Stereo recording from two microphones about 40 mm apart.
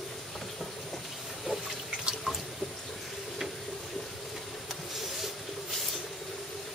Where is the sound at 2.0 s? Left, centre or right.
Right.